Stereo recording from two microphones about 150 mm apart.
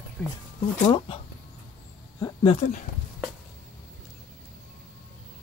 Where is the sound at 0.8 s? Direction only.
35° left (ahead or behind).